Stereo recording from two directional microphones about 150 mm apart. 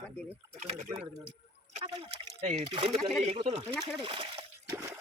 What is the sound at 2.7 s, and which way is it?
Speech, 35° right (ahead or behind).